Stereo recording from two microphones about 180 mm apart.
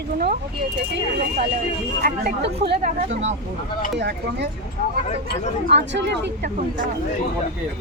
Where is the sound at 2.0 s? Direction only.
60° right (ahead or behind).